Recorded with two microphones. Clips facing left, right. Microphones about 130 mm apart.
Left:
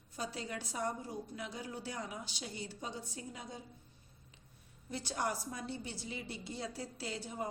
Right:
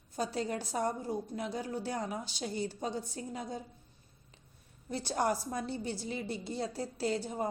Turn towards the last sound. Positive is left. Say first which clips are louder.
# right 8 dB
turn(degrees=-40)  # may be behind; listen again after turning